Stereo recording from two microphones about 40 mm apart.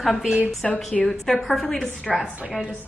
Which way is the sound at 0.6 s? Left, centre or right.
Centre.